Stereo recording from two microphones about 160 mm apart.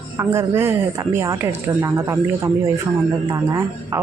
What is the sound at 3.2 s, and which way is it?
Speech, 20° right (ahead or behind).